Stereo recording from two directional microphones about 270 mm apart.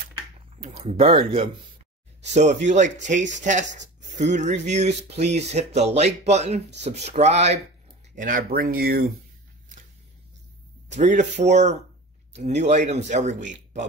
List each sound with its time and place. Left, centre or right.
0.7 s speech: right
10.9 s speech: right